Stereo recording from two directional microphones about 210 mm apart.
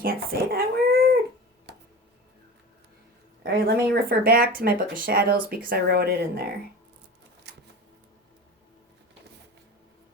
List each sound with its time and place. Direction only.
0.0 s a sound: 45° right (ahead or behind)
1.7 s tick-tock: 55° right (ahead or behind)
3.4 s a woman's voice: 45° right (ahead or behind)